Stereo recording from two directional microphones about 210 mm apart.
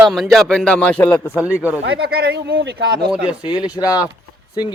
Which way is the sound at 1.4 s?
5° right (ahead or behind).